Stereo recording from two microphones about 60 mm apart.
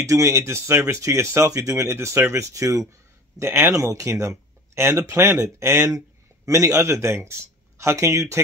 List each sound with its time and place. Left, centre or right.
0.0 s speech: right
3.3 s speech: right
3.7 s speech: right
5.6 s speech: right